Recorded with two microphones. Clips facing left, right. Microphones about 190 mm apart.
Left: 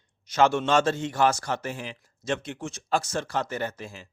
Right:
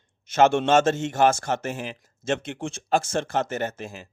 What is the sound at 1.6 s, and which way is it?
Speech, 50° right (ahead or behind).